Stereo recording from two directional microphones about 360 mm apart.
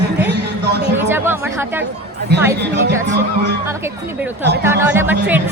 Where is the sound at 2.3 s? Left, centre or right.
Right.